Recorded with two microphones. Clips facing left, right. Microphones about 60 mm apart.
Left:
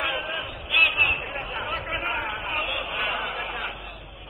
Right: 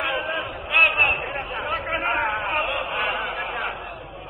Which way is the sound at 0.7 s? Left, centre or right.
Right.